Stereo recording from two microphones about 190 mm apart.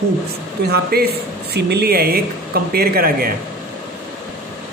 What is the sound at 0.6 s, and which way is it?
Speech, 55° right (ahead or behind).